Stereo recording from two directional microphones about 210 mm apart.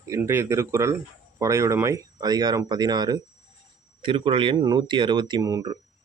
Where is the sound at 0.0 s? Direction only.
15° right (ahead or behind).